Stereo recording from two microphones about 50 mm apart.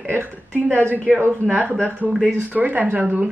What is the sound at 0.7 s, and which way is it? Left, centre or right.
Speech, right.